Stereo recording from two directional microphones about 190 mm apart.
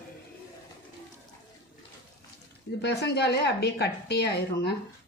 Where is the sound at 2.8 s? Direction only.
60° left (ahead or behind).